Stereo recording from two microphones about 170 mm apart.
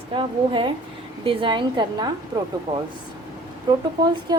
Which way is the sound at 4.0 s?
25° right (ahead or behind).